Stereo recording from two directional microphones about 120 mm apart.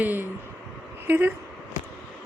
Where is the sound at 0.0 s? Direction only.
15° right (ahead or behind).